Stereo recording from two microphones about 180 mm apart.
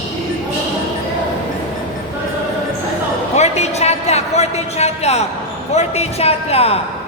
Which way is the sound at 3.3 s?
35° left (ahead or behind).